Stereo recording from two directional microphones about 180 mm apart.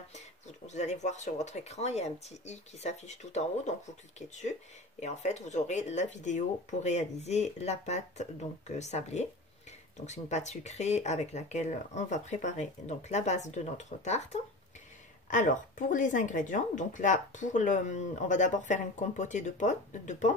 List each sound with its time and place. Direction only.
0.7 s speech: 40° left (ahead or behind)
5.0 s speech: 40° left (ahead or behind)